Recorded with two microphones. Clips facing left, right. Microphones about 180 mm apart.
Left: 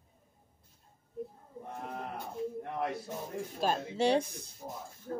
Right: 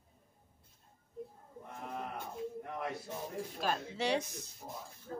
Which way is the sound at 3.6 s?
30° left (ahead or behind).